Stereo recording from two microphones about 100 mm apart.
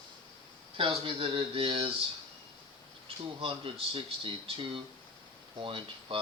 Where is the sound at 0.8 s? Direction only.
65° right (ahead or behind).